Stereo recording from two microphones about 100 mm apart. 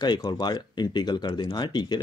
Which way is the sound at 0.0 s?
45° left (ahead or behind).